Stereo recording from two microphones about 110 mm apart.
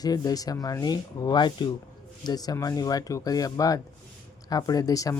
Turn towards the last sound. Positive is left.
turn(degrees=30)  # may be behind; listen again after turning